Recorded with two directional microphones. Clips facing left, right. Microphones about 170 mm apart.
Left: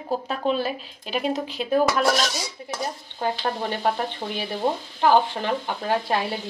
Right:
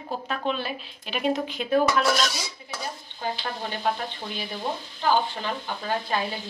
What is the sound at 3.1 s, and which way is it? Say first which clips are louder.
Speech: left 6 dB; 50° left (ahead or behind).